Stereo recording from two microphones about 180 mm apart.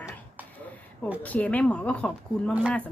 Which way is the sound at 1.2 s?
10° left (ahead or behind).